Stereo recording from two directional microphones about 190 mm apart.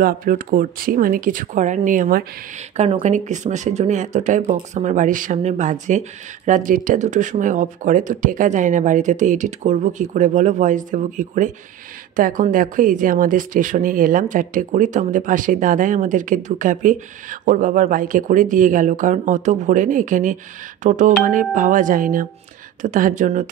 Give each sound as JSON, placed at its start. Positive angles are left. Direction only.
{"t": 0.0, "sound": "speech", "side_deg": -50}